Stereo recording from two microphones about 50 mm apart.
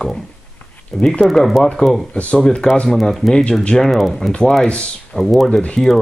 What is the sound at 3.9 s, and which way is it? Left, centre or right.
Speech, centre.